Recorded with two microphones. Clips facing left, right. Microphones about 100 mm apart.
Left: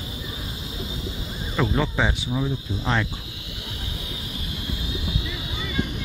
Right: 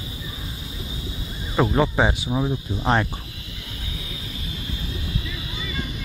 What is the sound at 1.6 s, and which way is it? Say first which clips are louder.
Speech: right 4 dB; 20° right (ahead or behind).